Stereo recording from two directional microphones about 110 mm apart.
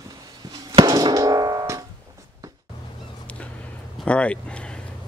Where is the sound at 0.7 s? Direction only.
40° right (ahead or behind).